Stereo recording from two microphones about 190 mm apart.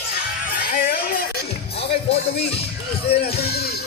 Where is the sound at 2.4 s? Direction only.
30° left (ahead or behind).